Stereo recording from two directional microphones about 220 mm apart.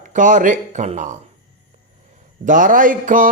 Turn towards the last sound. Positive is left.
turn(degrees=-35)  # may be behind; listen again after turning